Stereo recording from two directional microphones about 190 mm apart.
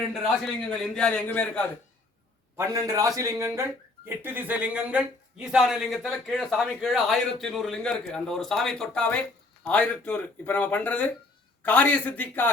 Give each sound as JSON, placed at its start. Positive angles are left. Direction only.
{"t": 0.1, "sound": "speech", "side_deg": 0}
{"t": 2.7, "sound": "speech", "side_deg": -15}